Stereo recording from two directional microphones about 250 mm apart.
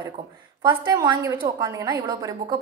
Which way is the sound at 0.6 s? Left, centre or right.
Centre.